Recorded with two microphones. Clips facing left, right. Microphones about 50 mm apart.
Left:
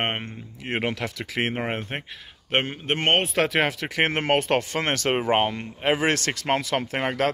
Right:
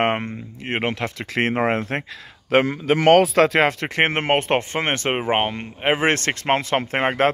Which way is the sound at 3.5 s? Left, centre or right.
Right.